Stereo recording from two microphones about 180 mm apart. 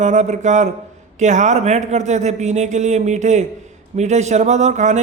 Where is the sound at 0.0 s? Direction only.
40° right (ahead or behind).